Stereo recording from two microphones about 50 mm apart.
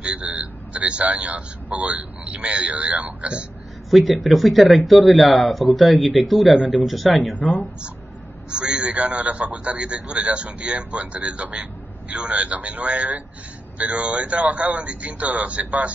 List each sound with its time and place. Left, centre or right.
0.0 s speech: right
3.9 s speech: centre
6.5 s a man's voice: right
6.9 s speech: centre
8.5 s a man's voice: right